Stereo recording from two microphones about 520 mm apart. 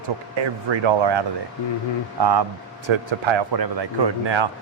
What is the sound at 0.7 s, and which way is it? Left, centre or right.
Speech, right.